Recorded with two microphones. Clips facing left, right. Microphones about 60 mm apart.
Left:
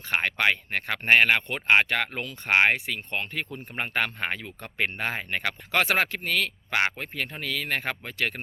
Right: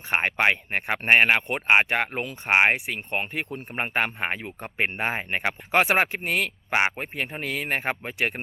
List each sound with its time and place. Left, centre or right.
0.1 s speech: right